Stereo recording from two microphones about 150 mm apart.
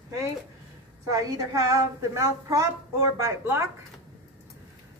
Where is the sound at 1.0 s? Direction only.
25° right (ahead or behind).